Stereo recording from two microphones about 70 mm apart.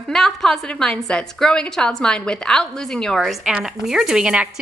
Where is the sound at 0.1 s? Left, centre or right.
Centre.